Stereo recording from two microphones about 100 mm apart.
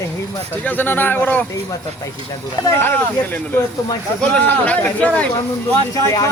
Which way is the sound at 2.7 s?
20° left (ahead or behind).